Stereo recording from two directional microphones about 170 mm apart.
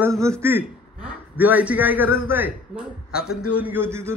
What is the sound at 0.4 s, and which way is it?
A man's voice, 15° right (ahead or behind).